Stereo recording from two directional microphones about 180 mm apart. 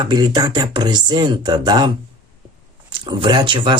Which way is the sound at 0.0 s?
20° right (ahead or behind).